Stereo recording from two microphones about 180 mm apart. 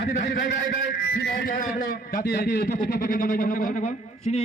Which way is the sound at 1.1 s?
55° left (ahead or behind).